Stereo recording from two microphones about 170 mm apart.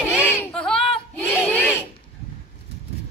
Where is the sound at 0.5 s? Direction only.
5° left (ahead or behind).